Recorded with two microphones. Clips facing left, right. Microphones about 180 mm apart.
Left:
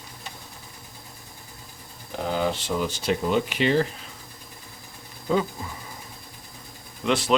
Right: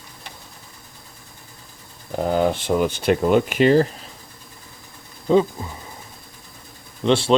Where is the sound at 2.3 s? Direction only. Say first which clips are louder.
Right 6 dB; 50° right (ahead or behind).